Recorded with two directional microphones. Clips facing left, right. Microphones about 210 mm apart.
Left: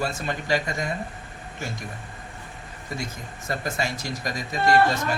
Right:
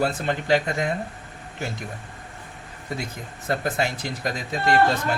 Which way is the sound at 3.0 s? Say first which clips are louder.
Right 1 dB; 60° right (ahead or behind).